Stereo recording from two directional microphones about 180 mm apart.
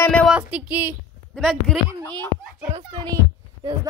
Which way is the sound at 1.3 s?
Centre (ahead or behind).